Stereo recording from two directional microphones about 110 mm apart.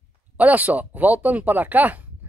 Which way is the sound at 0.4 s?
15° right (ahead or behind).